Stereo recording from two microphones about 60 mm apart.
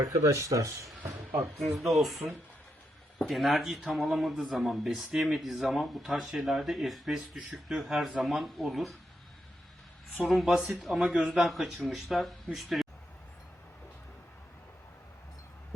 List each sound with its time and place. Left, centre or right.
0.0 s speech: right
1.6 s speech: centre
10.2 s speech: centre